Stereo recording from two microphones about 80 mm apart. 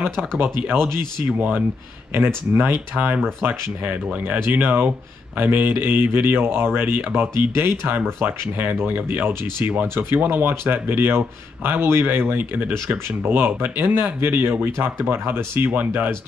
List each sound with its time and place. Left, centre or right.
0.1 s speech: centre
0.4 s speech: right